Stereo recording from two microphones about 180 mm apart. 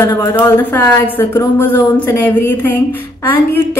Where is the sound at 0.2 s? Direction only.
10° left (ahead or behind).